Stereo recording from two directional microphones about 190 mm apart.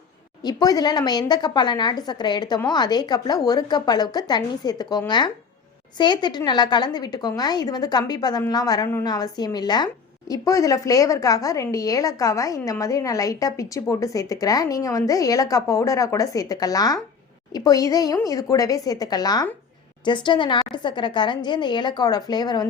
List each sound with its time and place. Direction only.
0.4 s a woman's voice: 20° left (ahead or behind)